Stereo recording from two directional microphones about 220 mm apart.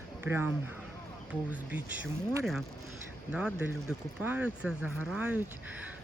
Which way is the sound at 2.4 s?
Centre (ahead or behind).